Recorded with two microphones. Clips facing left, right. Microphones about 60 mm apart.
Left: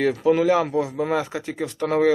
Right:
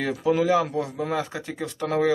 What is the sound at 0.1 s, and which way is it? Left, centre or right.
Speech, centre.